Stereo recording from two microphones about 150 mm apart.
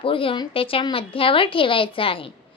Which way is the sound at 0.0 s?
35° left (ahead or behind).